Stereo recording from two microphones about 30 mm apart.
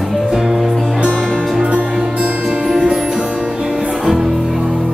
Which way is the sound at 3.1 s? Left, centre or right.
Right.